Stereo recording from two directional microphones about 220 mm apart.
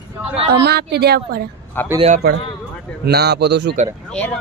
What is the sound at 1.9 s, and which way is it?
Speech, 30° right (ahead or behind).